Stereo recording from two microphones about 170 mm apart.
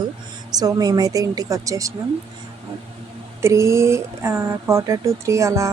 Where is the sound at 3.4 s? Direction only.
15° right (ahead or behind).